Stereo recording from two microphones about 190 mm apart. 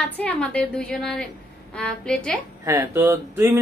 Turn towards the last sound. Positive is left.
turn(degrees=-10)  # may be behind; listen again after turning